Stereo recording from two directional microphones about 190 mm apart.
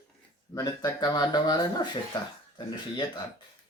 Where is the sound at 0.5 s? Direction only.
20° left (ahead or behind).